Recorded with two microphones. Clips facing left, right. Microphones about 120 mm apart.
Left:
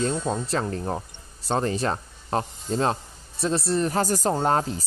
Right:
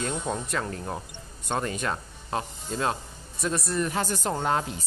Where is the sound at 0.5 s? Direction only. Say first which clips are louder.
Left 4 dB; 35° left (ahead or behind).